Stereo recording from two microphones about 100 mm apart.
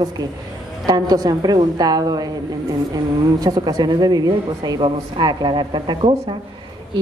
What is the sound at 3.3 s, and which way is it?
A woman's voice, 40° right (ahead or behind).